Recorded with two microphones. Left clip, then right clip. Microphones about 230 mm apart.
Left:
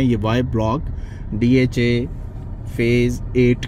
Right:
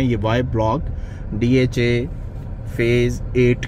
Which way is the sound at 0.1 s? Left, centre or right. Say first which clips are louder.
Even; left.